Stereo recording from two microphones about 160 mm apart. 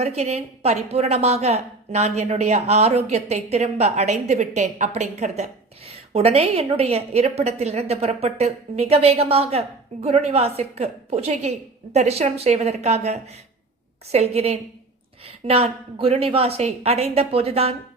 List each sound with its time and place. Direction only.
0.0 s a woman's voice: 40° right (ahead or behind)